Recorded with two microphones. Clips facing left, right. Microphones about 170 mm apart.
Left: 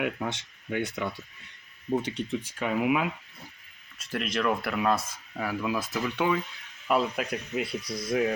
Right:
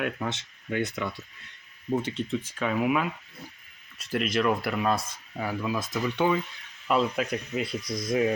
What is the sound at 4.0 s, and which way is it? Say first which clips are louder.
Speech: right 3 dB; centre (ahead or behind).